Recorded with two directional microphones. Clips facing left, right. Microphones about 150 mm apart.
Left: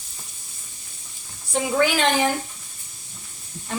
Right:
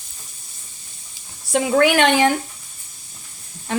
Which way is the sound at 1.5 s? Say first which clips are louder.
Right 5 dB; 70° right (ahead or behind).